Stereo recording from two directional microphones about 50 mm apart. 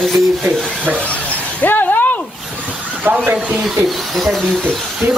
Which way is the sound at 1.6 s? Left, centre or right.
Left.